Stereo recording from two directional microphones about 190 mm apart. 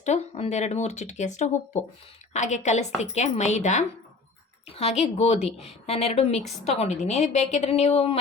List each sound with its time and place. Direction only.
0.0 s a woman's voice: 35° left (ahead or behind)